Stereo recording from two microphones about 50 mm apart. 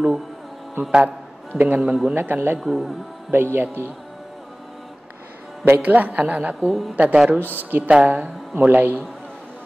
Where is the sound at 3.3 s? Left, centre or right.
Right.